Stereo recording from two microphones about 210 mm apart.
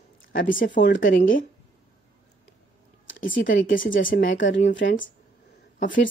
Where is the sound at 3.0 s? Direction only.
65° left (ahead or behind).